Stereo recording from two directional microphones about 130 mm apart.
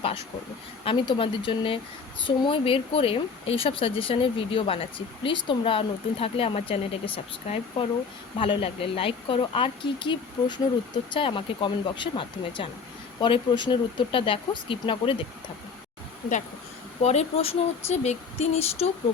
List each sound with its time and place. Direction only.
0.9 s speech: 40° left (ahead or behind)
17.0 s speech: 55° left (ahead or behind)